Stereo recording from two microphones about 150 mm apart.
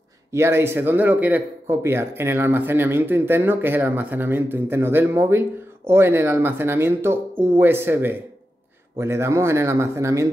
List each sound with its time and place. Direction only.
0.3 s speech: 15° right (ahead or behind)